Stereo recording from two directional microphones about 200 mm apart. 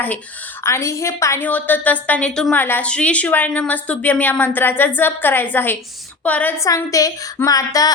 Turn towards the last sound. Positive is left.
turn(degrees=20)  # may be behind; listen again after turning